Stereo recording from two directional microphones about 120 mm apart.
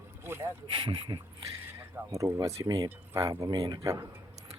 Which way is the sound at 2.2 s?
20° right (ahead or behind).